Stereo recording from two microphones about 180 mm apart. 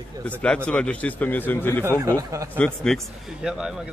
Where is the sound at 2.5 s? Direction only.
5° left (ahead or behind).